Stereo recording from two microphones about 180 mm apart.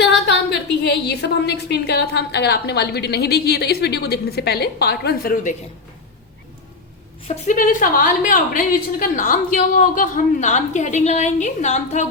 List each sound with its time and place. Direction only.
0.8 s a woman's voice: 65° left (ahead or behind); by 5.5 s 50° left (ahead or behind)
7.3 s a woman's voice: 45° left (ahead or behind)